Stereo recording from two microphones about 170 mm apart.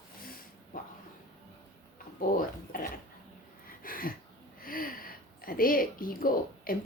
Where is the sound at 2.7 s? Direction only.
55° left (ahead or behind).